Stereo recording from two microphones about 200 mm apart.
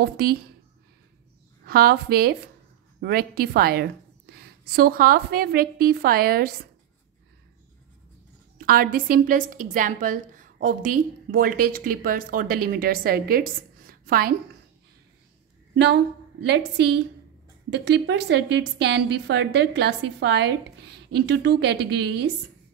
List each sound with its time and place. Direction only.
0.0 s a woman's voice: 50° right (ahead or behind)
1.7 s a woman's voice: 50° right (ahead or behind)
8.5 s a woman's voice: 45° right (ahead or behind)
15.7 s a woman's voice: 55° right (ahead or behind)